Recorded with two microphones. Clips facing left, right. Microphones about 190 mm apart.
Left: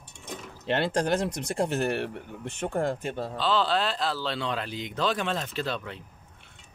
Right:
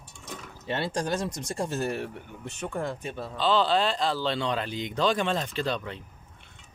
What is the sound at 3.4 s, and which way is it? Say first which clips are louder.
Speech: right 3 dB; centre (ahead or behind).